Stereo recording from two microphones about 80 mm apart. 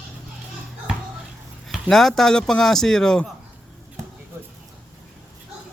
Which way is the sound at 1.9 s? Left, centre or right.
Centre.